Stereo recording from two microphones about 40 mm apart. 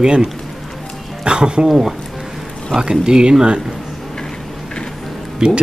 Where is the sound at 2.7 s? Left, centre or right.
Centre.